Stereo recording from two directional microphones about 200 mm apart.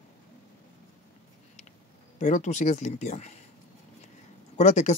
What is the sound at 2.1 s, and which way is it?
Speech, 40° left (ahead or behind).